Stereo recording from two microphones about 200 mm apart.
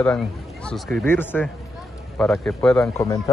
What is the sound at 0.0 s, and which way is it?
A man's voice, 5° left (ahead or behind).